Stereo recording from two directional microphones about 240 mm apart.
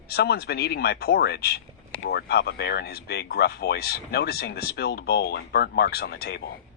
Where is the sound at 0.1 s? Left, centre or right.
Left.